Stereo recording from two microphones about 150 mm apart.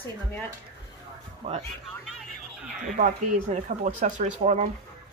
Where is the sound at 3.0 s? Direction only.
55° right (ahead or behind).